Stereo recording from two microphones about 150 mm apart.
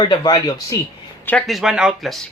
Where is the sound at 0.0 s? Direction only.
30° left (ahead or behind).